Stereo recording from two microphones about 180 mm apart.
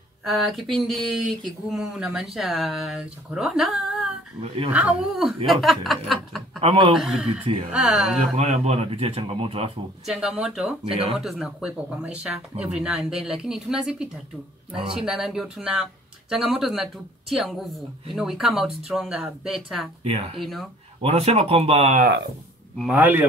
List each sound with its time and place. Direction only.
0.2 s speech: centre (ahead or behind)
5.5 s snicker: centre (ahead or behind)
6.6 s speech: 30° right (ahead or behind)
7.0 s speech: 5° right (ahead or behind)
8.4 s speech: 40° right (ahead or behind)
10.0 s speech: centre (ahead or behind)
20.0 s speech: 35° right (ahead or behind)
22.8 s speech: 10° right (ahead or behind)